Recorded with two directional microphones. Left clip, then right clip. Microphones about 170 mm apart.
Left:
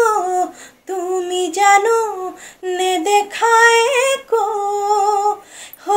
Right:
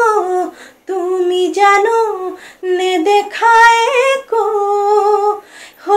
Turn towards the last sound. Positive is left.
turn(degrees=45)  # may be behind; listen again after turning